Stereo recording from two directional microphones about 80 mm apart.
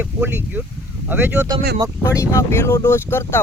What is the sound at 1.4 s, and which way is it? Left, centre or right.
Speech, right.